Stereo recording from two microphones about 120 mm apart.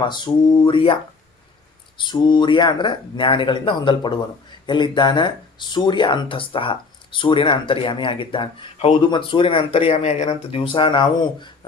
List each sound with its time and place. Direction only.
0.1 s speech: 40° left (ahead or behind)
2.0 s speech: 40° left (ahead or behind)
10.0 s speech: 70° left (ahead or behind); by 11.5 s 40° left (ahead or behind)